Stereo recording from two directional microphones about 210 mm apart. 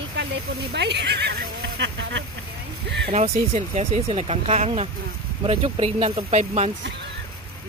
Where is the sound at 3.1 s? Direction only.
30° right (ahead or behind).